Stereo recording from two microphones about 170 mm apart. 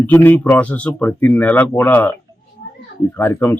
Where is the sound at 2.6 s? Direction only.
55° left (ahead or behind).